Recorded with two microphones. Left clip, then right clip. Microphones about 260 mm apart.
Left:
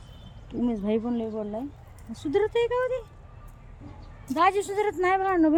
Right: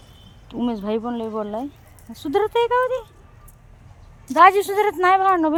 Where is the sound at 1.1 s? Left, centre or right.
Right.